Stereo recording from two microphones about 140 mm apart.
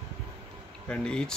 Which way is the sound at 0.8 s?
5° left (ahead or behind).